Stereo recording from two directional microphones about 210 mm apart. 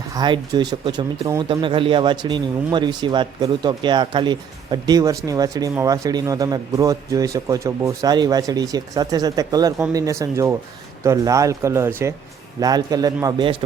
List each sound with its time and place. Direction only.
0.1 s speech: 20° right (ahead or behind)